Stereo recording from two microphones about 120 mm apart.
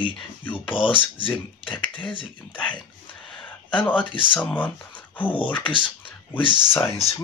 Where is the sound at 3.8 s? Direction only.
10° left (ahead or behind).